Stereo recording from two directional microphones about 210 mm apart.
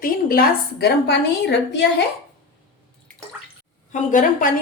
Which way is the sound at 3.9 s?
40° left (ahead or behind).